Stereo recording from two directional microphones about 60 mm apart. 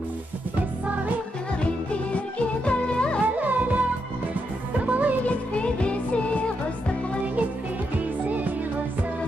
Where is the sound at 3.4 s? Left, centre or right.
Right.